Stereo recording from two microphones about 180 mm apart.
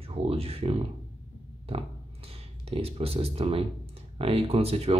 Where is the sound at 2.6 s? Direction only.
35° right (ahead or behind).